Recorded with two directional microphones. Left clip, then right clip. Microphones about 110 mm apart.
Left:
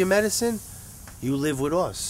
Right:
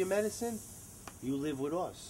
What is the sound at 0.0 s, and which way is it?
Speech, 10° left (ahead or behind).